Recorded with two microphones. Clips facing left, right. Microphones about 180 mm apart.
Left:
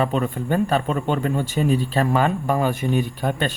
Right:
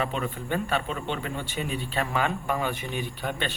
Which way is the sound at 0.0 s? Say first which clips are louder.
Left 8 dB; 40° left (ahead or behind).